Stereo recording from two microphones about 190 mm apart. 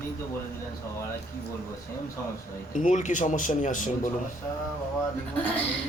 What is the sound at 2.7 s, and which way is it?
A man's voice, 40° left (ahead or behind).